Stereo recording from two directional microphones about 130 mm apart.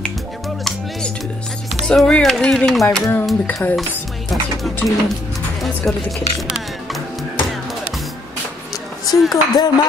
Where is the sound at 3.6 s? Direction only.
15° left (ahead or behind).